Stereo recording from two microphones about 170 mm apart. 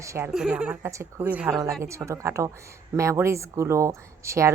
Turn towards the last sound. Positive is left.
turn(degrees=-15)  # may be behind; listen again after turning